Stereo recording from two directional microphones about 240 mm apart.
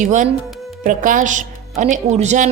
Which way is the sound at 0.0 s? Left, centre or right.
Right.